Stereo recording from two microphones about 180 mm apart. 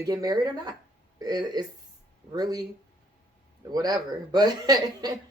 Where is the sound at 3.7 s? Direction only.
20° right (ahead or behind).